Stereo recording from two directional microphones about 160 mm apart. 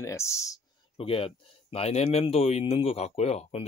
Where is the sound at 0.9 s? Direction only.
35° left (ahead or behind).